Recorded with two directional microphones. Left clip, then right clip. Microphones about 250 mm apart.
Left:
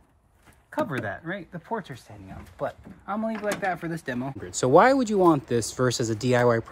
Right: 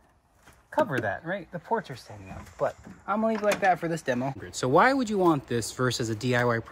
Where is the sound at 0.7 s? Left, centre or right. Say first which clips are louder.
Right 3 dB; right.